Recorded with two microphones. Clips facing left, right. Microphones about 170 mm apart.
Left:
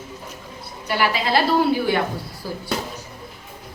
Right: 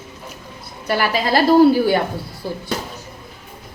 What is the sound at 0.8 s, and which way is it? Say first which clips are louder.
A woman's voice: right 2 dB; 45° right (ahead or behind).